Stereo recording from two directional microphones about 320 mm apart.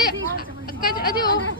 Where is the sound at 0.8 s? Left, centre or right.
Left.